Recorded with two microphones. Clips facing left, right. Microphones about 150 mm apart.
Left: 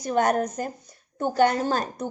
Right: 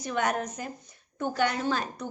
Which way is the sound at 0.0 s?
40° left (ahead or behind).